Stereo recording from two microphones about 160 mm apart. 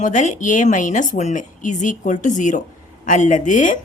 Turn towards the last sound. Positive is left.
turn(degrees=50)  # may be behind; listen again after turning